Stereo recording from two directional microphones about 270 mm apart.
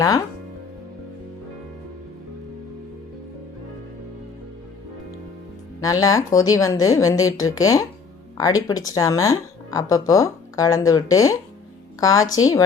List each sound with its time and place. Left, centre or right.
5.8 s speech: centre